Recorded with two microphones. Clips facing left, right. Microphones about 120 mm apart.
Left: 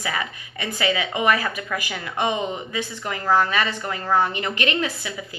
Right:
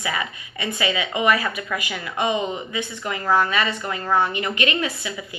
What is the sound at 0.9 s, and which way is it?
A woman's voice, 35° left (ahead or behind).